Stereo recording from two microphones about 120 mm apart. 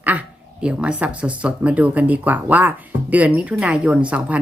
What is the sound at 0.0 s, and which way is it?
Speech, 10° right (ahead or behind).